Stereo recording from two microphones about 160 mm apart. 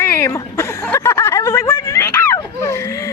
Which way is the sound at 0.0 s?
15° left (ahead or behind).